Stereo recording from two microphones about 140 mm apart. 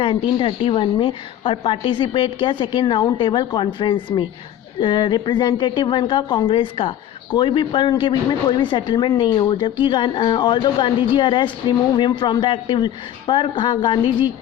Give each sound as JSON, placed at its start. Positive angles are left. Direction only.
{"t": 0.0, "sound": "a woman's voice", "side_deg": 40}